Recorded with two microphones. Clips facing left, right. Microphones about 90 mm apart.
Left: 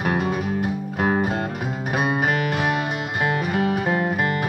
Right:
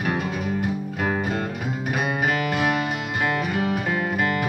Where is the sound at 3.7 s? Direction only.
30° left (ahead or behind).